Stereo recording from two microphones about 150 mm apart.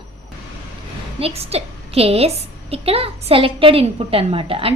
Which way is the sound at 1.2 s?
40° right (ahead or behind).